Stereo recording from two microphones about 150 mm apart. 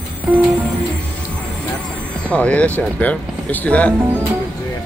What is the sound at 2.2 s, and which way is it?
Speech, 10° left (ahead or behind).